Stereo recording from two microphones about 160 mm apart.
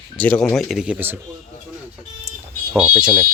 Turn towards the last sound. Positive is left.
turn(degrees=-5)  # may be behind; listen again after turning